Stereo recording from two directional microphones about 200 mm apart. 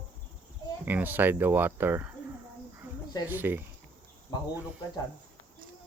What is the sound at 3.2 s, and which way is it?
Speech, 10° right (ahead or behind).